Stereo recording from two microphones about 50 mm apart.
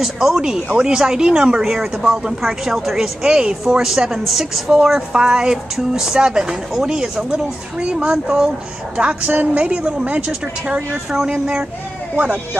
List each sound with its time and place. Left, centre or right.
0.0 s a woman's voice: centre
8.9 s speech: right
9.6 s speech: centre